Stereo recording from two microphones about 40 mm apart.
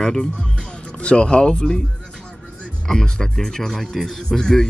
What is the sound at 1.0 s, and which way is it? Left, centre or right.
Speech, left.